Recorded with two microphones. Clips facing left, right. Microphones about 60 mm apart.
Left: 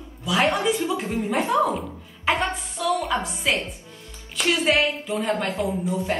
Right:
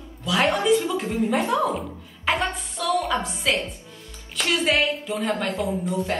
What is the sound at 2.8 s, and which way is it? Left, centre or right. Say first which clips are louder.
Music: left 1 dB; centre.